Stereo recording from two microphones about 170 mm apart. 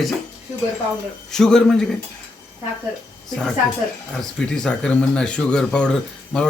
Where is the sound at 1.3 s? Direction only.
5° left (ahead or behind).